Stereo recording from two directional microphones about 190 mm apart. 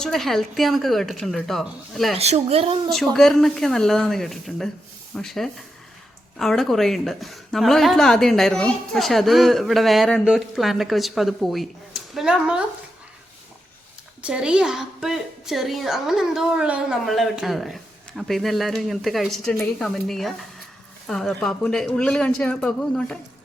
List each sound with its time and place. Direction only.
0.0 s a woman's voice: centre (ahead or behind)
2.1 s speech: 35° right (ahead or behind)
2.9 s a woman's voice: centre (ahead or behind)
14.3 s a woman's voice: 5° right (ahead or behind)